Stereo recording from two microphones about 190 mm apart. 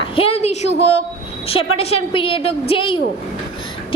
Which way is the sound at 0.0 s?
30° left (ahead or behind).